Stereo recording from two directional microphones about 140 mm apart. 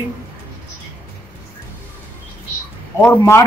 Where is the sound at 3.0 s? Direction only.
20° left (ahead or behind).